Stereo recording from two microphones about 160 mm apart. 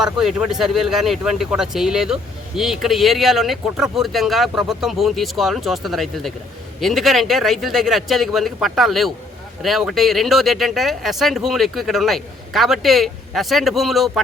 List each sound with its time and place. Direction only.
0.0 s speech: 5° right (ahead or behind)